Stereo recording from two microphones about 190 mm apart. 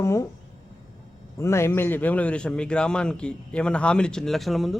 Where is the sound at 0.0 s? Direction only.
15° left (ahead or behind).